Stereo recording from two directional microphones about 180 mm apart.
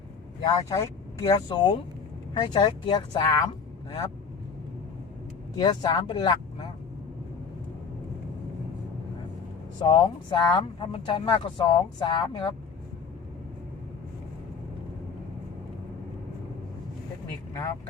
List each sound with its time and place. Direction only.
0.4 s speech: 20° left (ahead or behind)
5.5 s speech: 25° left (ahead or behind)
9.8 s speech: 25° left (ahead or behind)